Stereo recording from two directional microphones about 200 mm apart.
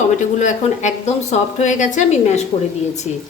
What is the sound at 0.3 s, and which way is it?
A woman's voice, 35° left (ahead or behind).